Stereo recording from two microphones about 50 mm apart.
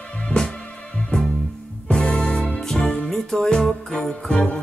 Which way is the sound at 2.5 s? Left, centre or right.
Centre.